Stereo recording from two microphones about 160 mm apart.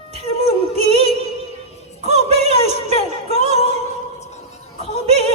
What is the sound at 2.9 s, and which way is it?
Music, 40° left (ahead or behind).